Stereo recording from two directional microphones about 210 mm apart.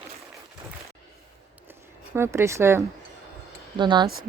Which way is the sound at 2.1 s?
10° right (ahead or behind).